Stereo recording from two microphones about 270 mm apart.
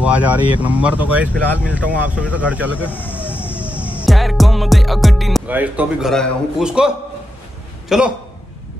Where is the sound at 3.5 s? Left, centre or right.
Centre.